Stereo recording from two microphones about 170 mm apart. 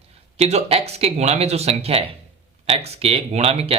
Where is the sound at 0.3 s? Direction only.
40° right (ahead or behind).